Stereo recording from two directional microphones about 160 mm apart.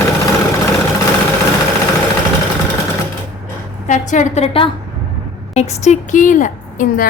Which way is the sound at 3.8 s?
50° left (ahead or behind).